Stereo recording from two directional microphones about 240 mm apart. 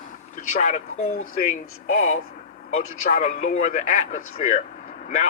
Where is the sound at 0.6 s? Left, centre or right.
Left.